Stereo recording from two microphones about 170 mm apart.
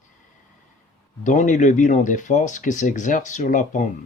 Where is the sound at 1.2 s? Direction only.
45° left (ahead or behind).